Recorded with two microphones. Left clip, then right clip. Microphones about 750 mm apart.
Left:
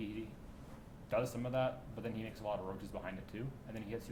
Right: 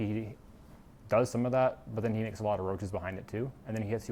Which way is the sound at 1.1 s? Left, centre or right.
Right.